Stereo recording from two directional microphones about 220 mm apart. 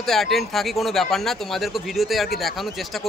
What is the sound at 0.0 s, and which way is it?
Speech, centre (ahead or behind).